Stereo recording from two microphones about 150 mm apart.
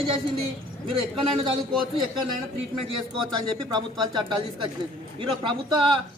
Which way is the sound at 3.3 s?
30° right (ahead or behind).